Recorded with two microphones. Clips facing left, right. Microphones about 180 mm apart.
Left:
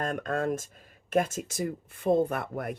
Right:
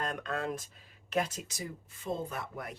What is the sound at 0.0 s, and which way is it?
Speech, 50° left (ahead or behind).